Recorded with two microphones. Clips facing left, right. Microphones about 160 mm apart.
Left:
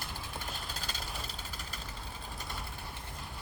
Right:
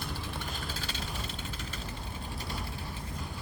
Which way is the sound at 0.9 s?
40° left (ahead or behind).